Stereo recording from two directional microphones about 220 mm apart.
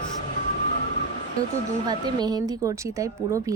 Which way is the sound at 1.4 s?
15° right (ahead or behind).